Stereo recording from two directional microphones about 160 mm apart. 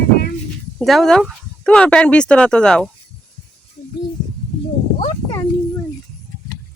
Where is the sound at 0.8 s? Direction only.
Centre (ahead or behind).